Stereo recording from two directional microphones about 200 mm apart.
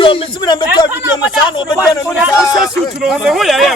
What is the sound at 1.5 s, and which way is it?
Speech, 20° left (ahead or behind).